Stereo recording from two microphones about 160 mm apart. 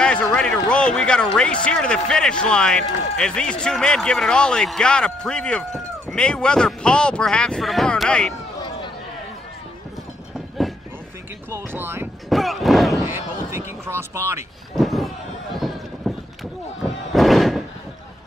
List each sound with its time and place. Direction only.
0.0 s speech: 5° left (ahead or behind)
11.5 s speech: 15° right (ahead or behind)
12.3 s speech: centre (ahead or behind)
12.9 s artillery fire: 20° right (ahead or behind)
14.8 s a sound: centre (ahead or behind)
17.1 s a sound: centre (ahead or behind)